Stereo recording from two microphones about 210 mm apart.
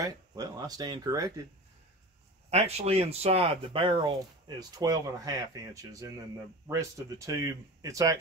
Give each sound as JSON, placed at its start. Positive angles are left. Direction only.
{"t": 0.0, "sound": "speech", "side_deg": -15}
{"t": 2.5, "sound": "speech", "side_deg": -30}